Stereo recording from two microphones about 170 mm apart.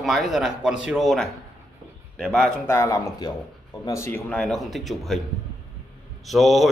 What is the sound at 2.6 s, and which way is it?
Speech, 15° left (ahead or behind).